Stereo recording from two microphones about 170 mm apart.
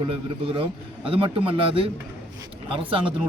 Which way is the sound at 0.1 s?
35° right (ahead or behind).